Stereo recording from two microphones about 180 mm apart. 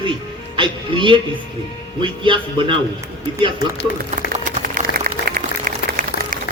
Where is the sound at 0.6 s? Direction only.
30° right (ahead or behind).